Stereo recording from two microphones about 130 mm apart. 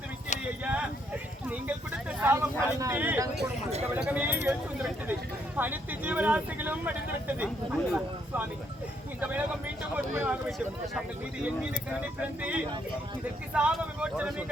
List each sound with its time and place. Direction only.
0.6 s clip-clop: 10° right (ahead or behind)
2.8 s speech: 15° right (ahead or behind)
5.5 s speech: 15° right (ahead or behind)
12.4 s speech: 10° right (ahead or behind)